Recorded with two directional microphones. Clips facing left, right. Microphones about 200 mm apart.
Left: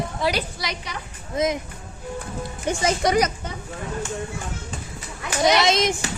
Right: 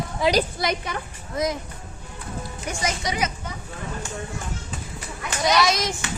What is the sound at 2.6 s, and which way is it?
Speech, 30° left (ahead or behind).